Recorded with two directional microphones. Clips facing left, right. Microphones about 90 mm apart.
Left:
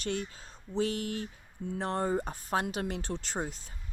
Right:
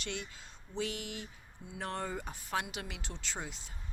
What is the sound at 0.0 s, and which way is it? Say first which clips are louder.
Speech: left 7 dB; 40° left (ahead or behind).